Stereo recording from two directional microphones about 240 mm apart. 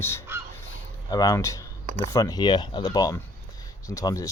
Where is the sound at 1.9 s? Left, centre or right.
Right.